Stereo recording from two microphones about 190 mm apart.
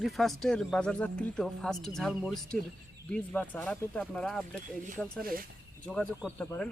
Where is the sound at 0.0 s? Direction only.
Centre (ahead or behind).